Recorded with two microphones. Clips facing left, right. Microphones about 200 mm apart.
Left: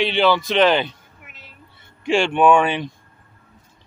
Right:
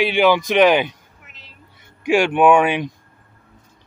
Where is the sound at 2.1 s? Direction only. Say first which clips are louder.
Right 2 dB; 10° right (ahead or behind).